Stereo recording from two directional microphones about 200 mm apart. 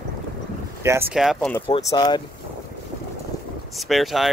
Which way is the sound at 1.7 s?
20° left (ahead or behind).